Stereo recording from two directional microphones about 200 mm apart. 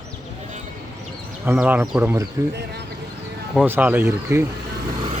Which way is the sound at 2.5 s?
55° right (ahead or behind).